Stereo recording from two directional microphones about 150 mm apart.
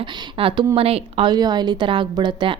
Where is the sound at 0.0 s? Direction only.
35° right (ahead or behind).